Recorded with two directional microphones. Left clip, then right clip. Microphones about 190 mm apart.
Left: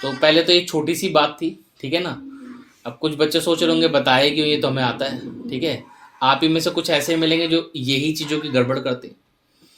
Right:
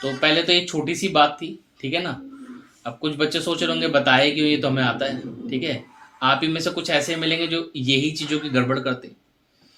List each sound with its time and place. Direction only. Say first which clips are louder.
0.0 s speech: left 4 dB; 45° left (ahead or behind)